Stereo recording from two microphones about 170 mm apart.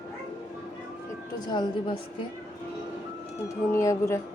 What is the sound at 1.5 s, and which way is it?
Speech, 25° left (ahead or behind).